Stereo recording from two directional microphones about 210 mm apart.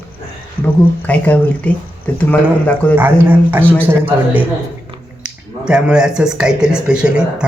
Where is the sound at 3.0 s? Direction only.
10° right (ahead or behind).